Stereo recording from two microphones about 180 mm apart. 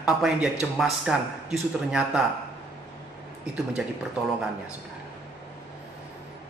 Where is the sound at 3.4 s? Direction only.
5° right (ahead or behind).